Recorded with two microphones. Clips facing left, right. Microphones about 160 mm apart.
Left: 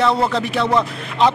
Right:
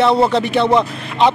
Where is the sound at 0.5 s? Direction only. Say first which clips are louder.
Right 4 dB; 25° right (ahead or behind).